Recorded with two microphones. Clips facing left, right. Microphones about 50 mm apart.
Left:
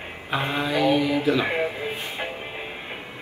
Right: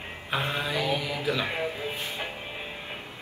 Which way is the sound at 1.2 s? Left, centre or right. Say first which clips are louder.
Left 6 dB; left.